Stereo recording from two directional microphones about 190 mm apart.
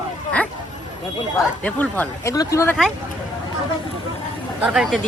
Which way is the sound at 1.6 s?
10° left (ahead or behind).